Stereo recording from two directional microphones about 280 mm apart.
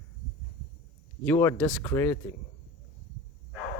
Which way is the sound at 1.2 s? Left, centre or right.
Centre.